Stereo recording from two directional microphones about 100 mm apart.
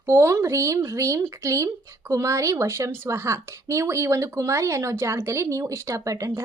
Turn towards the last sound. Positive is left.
turn(degrees=-30)  # may be behind; listen again after turning